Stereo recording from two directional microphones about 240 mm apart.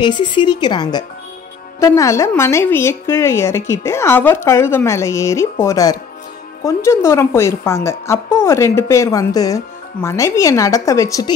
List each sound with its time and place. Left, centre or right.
0.0 s a woman's voice: centre